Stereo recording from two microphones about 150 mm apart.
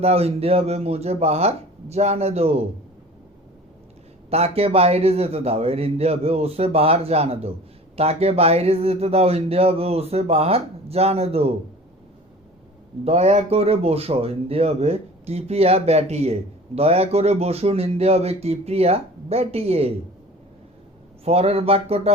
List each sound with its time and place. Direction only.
0.0 s speech: 40° right (ahead or behind)
4.3 s speech: 40° right (ahead or behind)
13.1 s speech: 45° right (ahead or behind)
21.2 s speech: 45° right (ahead or behind)